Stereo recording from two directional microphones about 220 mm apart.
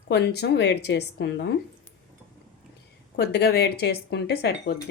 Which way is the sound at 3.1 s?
50° left (ahead or behind).